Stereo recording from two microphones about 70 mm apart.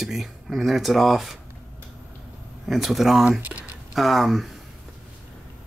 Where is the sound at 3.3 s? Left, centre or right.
Right.